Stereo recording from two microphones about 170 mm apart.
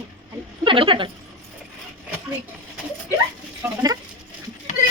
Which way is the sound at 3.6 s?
15° right (ahead or behind).